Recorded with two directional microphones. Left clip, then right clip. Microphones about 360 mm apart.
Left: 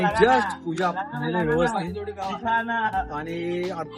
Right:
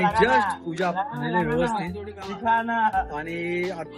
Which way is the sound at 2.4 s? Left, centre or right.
Centre.